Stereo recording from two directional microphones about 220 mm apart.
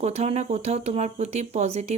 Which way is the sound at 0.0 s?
30° right (ahead or behind).